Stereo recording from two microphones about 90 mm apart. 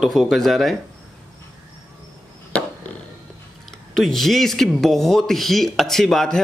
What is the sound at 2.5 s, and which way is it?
Chop, 15° left (ahead or behind).